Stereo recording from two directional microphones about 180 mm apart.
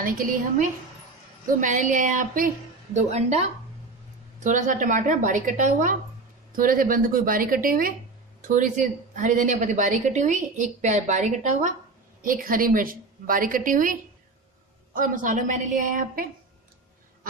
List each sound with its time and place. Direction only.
0.0 s a woman's voice: 50° right (ahead or behind)
15.0 s a woman's voice: 45° right (ahead or behind)